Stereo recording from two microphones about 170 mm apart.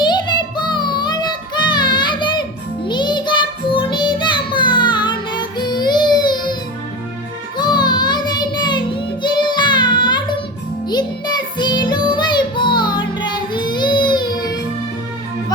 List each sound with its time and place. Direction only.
0.7 s child singing: 25° left (ahead or behind)
10.8 s music: 25° left (ahead or behind)